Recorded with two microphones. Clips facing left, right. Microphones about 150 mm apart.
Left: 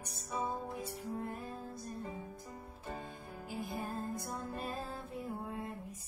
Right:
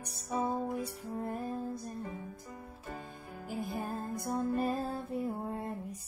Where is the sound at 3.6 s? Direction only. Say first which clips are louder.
Right 3 dB; 45° right (ahead or behind).